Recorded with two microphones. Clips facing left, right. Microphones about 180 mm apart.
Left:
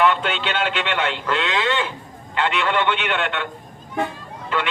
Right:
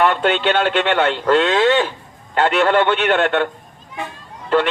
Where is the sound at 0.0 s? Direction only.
45° right (ahead or behind).